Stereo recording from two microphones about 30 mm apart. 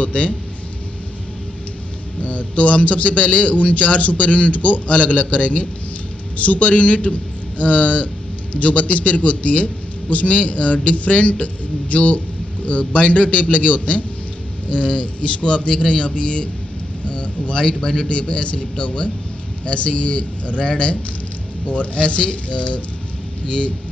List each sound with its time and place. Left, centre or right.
0.0 s a man's voice: left
2.2 s a man's voice: left
15.7 s a man's voice: left